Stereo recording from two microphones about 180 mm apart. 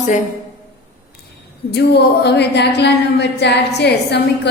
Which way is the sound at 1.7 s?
70° left (ahead or behind).